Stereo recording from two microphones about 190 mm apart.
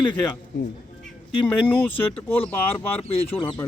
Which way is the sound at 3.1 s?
30° left (ahead or behind).